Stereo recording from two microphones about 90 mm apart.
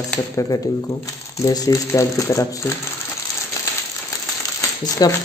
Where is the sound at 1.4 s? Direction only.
35° left (ahead or behind).